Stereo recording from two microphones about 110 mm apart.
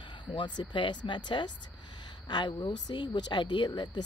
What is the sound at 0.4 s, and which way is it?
Speech, 45° left (ahead or behind).